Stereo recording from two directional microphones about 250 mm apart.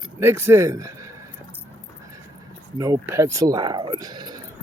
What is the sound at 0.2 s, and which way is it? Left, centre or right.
Speech, centre.